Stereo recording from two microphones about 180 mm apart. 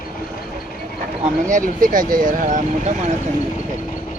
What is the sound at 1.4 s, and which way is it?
Speech, 45° right (ahead or behind).